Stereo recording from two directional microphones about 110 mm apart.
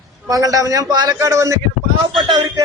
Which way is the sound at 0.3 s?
30° right (ahead or behind).